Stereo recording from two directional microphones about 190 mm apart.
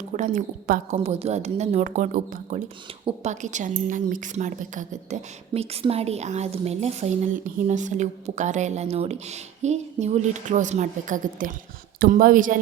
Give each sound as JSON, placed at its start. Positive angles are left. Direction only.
{"t": 0.1, "sound": "a woman's voice", "side_deg": -40}
{"t": 3.0, "sound": "a woman's voice", "side_deg": -35}